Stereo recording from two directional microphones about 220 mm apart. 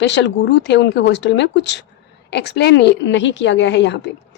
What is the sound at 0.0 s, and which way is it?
A woman's voice, 55° left (ahead or behind).